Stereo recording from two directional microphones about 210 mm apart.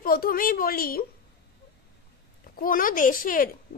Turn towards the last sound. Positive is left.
turn(degrees=40)  # may be behind; listen again after turning